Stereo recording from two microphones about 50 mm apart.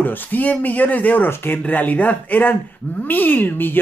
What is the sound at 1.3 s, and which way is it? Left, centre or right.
Speech, left.